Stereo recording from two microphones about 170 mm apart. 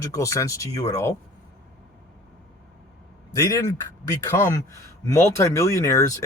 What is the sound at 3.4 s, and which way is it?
Speech, 20° left (ahead or behind).